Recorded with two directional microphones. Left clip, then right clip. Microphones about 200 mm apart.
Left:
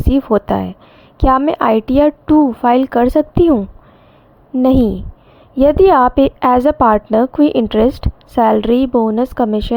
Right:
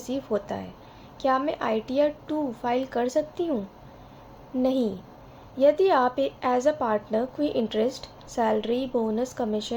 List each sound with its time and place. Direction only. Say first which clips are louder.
0.1 s a woman's voice: left 15 dB; 45° left (ahead or behind)
4.6 s a woman's voice: left 12 dB; 50° left (ahead or behind)